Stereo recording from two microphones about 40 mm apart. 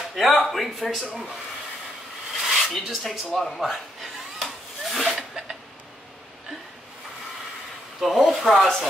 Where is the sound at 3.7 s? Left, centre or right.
Centre.